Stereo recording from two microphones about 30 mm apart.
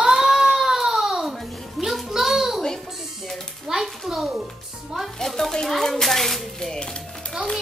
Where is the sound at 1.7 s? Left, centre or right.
Centre.